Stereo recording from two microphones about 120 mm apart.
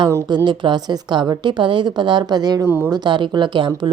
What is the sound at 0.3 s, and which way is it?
Speech, 40° right (ahead or behind).